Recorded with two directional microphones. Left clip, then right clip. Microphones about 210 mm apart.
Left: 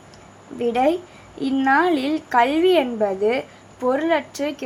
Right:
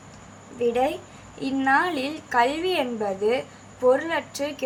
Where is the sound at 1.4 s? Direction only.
30° left (ahead or behind).